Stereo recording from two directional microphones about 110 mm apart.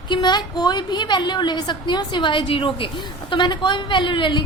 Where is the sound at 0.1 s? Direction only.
40° left (ahead or behind).